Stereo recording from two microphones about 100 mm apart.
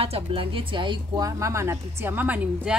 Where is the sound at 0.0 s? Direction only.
70° right (ahead or behind); by 1.2 s 50° right (ahead or behind).